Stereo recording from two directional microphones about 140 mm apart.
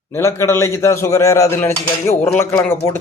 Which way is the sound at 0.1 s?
20° left (ahead or behind).